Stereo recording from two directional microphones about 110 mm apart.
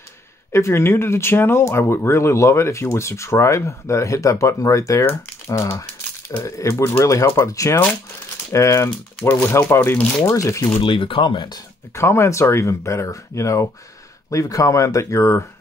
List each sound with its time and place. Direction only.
0.5 s speech: 25° left (ahead or behind)
10.2 s speech: 25° left (ahead or behind)
10.8 s speech: 50° left (ahead or behind)
11.9 s speech: 25° left (ahead or behind)